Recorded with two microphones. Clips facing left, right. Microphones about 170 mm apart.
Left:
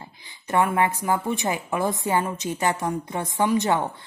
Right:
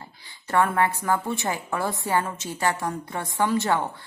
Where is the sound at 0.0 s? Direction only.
20° left (ahead or behind).